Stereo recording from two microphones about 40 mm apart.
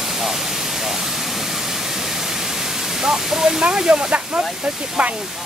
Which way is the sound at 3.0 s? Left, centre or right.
Centre.